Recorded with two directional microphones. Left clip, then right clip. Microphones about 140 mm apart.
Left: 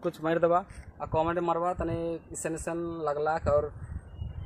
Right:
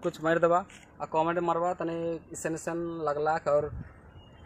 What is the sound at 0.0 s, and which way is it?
A man's voice, 5° right (ahead or behind).